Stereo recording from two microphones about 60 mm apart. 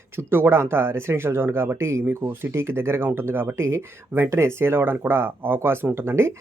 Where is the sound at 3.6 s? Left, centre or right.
Right.